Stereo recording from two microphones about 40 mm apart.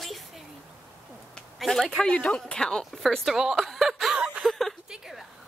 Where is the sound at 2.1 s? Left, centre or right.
Left.